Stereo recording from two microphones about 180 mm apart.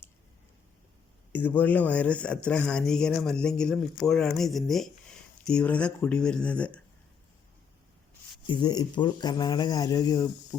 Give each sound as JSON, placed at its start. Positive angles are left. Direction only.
{"t": 1.3, "sound": "speech", "side_deg": 10}
{"t": 8.4, "sound": "speech", "side_deg": 25}